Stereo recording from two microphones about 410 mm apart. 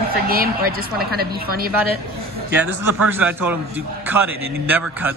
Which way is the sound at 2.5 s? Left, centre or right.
Centre.